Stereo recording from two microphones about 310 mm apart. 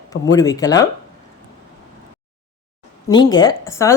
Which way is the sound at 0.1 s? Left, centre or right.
Centre.